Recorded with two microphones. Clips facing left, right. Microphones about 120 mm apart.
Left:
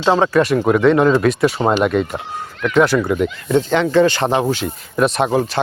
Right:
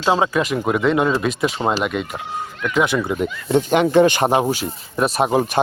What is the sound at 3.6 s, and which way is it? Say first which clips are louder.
Speech: even; 15° right (ahead or behind).